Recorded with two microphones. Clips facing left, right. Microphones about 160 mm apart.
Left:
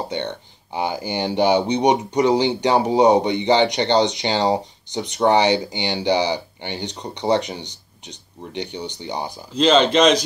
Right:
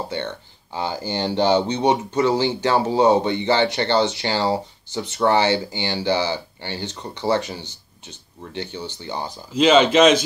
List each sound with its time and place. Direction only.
0.1 s speech: 15° left (ahead or behind)
9.5 s speech: 5° right (ahead or behind)